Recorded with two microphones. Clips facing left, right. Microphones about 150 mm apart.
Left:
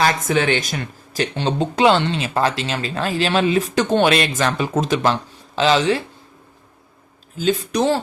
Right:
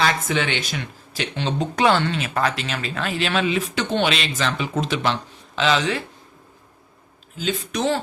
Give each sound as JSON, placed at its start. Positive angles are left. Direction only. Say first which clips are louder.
{"t": 0.0, "sound": "speech", "louder": "left 4 dB", "side_deg": 45}
{"t": 7.3, "sound": "speech", "louder": "left 6 dB", "side_deg": 35}